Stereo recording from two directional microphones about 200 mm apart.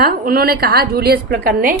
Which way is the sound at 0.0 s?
45° right (ahead or behind).